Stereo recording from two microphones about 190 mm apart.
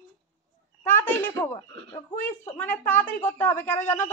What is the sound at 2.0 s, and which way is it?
A woman's voice, 10° left (ahead or behind).